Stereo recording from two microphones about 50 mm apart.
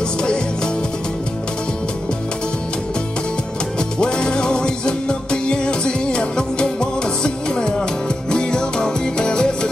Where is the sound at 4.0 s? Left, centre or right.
Centre.